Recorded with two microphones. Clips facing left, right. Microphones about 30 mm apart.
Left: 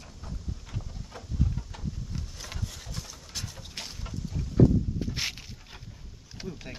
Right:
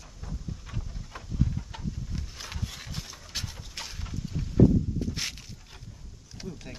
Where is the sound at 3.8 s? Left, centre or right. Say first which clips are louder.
Even; centre.